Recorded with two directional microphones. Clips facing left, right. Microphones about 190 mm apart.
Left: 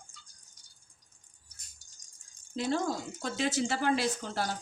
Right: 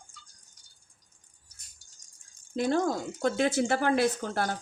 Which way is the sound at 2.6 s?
50° right (ahead or behind).